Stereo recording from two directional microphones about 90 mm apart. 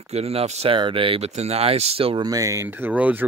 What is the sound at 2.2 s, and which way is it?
Speech, 40° right (ahead or behind).